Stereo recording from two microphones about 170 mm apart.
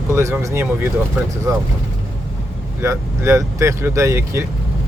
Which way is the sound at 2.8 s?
15° right (ahead or behind).